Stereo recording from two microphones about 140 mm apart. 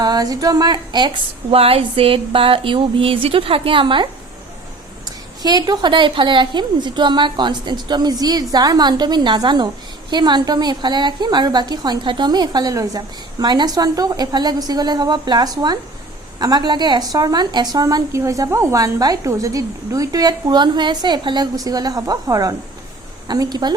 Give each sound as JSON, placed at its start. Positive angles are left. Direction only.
{"t": 0.0, "sound": "a woman's voice", "side_deg": -25}
{"t": 5.4, "sound": "a woman's voice", "side_deg": -30}